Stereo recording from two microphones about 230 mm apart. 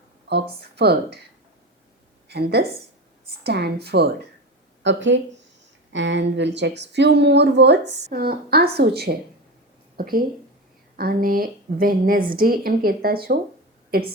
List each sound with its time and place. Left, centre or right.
0.3 s a woman's voice: right
2.3 s a woman's voice: right